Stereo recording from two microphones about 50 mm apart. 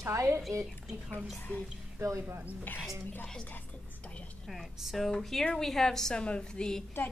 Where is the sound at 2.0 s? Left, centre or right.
Right.